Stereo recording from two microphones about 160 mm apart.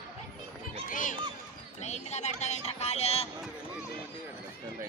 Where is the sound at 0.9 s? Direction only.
55° left (ahead or behind).